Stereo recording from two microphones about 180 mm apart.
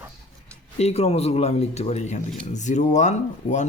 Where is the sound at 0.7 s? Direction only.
35° left (ahead or behind).